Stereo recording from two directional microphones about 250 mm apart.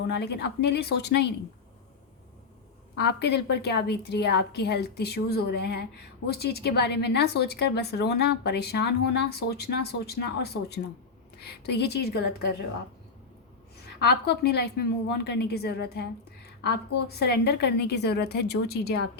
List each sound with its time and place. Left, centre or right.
0.1 s a woman's voice: left
3.0 s a woman's voice: left
14.0 s a woman's voice: left